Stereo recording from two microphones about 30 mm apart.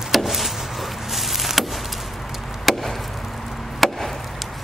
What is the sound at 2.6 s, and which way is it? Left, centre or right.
Chop, centre.